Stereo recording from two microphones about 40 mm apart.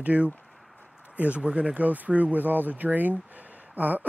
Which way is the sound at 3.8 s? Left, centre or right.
Right.